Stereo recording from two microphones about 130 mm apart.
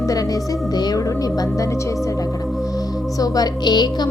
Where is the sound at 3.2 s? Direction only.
30° left (ahead or behind).